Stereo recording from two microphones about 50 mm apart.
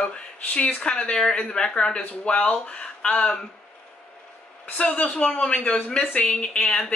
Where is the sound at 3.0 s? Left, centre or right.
Centre.